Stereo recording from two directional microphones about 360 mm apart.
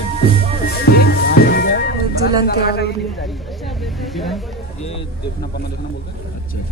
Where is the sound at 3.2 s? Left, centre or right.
Centre.